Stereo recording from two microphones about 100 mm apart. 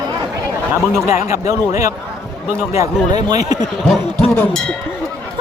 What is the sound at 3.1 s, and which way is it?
Speech, 40° right (ahead or behind).